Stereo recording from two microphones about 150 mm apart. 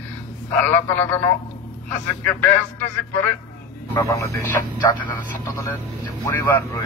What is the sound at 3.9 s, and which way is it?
Speech, 20° left (ahead or behind).